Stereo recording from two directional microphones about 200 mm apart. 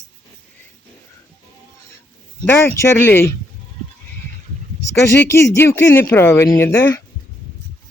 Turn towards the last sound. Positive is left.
turn(degrees=15)  # may be behind; listen again after turning